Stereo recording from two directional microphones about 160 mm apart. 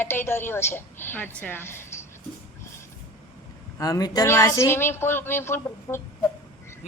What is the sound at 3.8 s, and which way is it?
A woman's voice, 20° left (ahead or behind).